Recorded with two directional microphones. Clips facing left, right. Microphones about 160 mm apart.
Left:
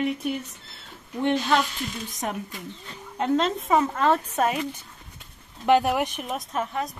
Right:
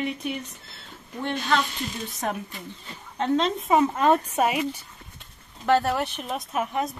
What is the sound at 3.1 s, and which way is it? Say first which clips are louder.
Speech: even; 5° left (ahead or behind).